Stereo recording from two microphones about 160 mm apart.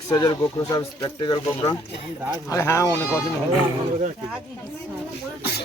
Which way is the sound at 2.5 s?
20° left (ahead or behind).